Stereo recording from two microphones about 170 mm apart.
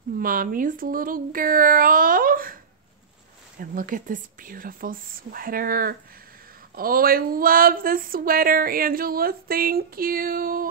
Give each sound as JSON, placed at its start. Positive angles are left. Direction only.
{"t": 0.2, "sound": "speech", "side_deg": -55}
{"t": 3.5, "sound": "speech", "side_deg": -55}